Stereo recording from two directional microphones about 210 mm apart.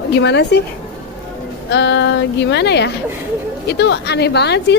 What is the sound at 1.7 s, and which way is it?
A woman's voice, 55° left (ahead or behind).